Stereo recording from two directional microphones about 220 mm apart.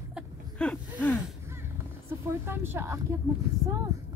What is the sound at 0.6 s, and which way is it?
Gasp, 5° left (ahead or behind).